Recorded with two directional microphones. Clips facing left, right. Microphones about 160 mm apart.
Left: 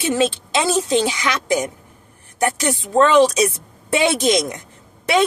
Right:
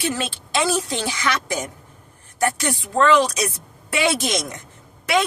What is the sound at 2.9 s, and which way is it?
Speech, 20° left (ahead or behind).